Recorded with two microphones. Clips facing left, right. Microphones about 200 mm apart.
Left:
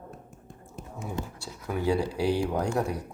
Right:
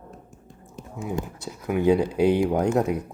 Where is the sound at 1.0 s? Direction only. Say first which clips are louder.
Right 6 dB; 15° right (ahead or behind).